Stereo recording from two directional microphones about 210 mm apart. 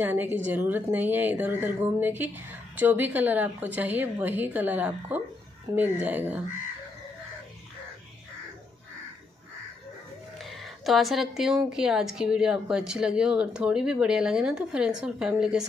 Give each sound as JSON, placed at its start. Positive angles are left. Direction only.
{"t": 0.0, "sound": "a woman's voice", "side_deg": -10}
{"t": 10.4, "sound": "a woman's voice", "side_deg": 0}